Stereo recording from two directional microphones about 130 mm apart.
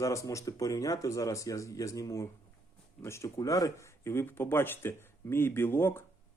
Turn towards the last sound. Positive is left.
turn(degrees=20)  # may be behind; listen again after turning